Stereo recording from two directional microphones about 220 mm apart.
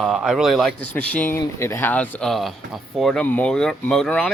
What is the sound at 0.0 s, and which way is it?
A man's voice, centre (ahead or behind).